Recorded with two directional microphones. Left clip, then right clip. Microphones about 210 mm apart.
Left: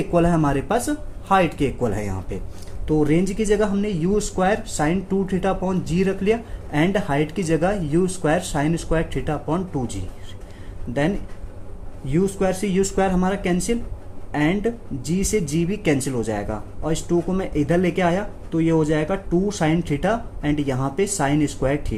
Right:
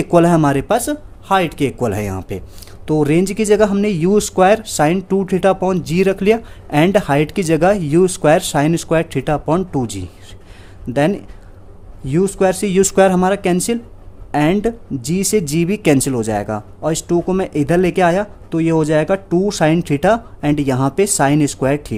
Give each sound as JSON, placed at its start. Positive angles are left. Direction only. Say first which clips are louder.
{"t": 0.1, "sound": "speech", "louder": "right 8 dB", "side_deg": -45}
{"t": 12.0, "sound": "speech", "louder": "right 6 dB", "side_deg": -50}